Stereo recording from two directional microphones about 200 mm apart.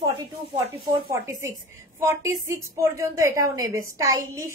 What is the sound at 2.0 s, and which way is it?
A woman's voice, 15° right (ahead or behind).